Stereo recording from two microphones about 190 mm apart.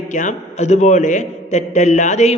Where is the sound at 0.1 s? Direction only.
40° left (ahead or behind).